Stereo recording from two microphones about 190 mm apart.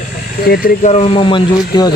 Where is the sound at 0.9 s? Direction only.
30° left (ahead or behind).